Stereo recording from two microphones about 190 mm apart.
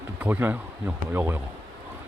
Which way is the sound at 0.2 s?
10° right (ahead or behind).